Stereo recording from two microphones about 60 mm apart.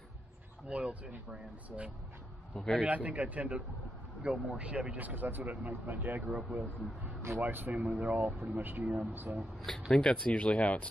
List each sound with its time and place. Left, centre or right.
0.7 s speech: centre
2.5 s speech: centre
2.8 s speech: right
6.2 s speech: centre
7.2 s a sound: right
7.4 s speech: right
9.8 s speech: centre